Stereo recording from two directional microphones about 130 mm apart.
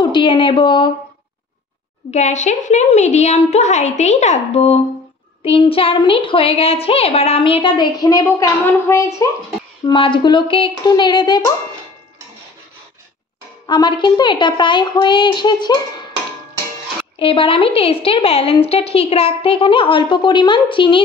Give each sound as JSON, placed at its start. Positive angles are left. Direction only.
{"t": 0.0, "sound": "a woman's voice", "side_deg": 35}
{"t": 2.0, "sound": "a woman's voice", "side_deg": 60}
{"t": 5.4, "sound": "a woman's voice", "side_deg": 45}
{"t": 9.8, "sound": "a woman's voice", "side_deg": 40}
{"t": 13.7, "sound": "a woman's voice", "side_deg": 35}
{"t": 17.2, "sound": "a woman's voice", "side_deg": 45}